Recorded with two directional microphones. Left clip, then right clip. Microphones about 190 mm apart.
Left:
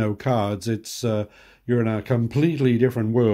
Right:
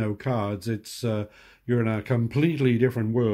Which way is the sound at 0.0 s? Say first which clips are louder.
Left 5 dB; 10° left (ahead or behind).